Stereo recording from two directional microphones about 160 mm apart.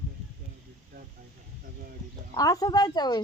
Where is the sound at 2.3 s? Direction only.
20° left (ahead or behind).